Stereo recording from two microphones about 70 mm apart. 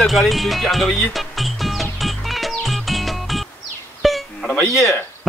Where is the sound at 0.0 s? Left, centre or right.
Centre.